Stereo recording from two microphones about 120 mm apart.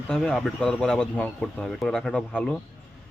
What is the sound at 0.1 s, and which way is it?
Speech, 5° left (ahead or behind).